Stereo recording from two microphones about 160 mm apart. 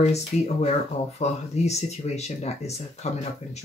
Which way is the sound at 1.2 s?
45° left (ahead or behind).